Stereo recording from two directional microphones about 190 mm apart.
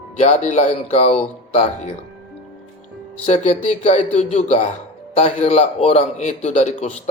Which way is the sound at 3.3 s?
40° left (ahead or behind).